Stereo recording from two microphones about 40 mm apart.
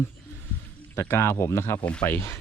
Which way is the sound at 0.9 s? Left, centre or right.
Left.